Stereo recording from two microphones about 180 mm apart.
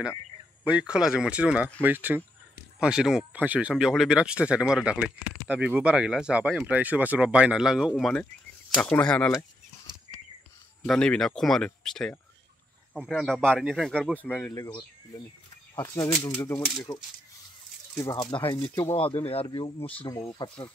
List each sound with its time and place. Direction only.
0.7 s speech: 5° right (ahead or behind)
10.9 s speech: 5° left (ahead or behind); by 20.6 s 30° left (ahead or behind)